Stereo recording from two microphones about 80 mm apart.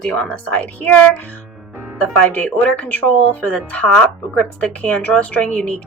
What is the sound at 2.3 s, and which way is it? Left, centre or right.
A woman's voice, centre.